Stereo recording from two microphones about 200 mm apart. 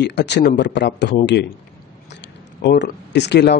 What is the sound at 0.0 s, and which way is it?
Speech, 60° left (ahead or behind).